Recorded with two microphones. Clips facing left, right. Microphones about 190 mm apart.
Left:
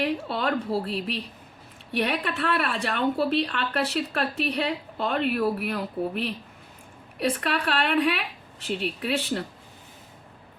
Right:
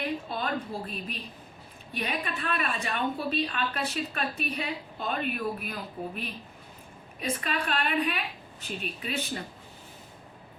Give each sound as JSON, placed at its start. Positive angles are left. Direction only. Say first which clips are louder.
{"t": 0.0, "sound": "a woman's voice", "louder": "left 6 dB", "side_deg": 75}